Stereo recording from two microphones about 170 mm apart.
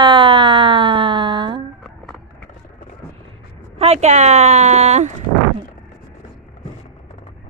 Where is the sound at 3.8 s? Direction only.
40° right (ahead or behind).